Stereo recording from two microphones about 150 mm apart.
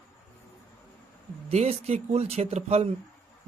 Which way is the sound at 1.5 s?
45° right (ahead or behind).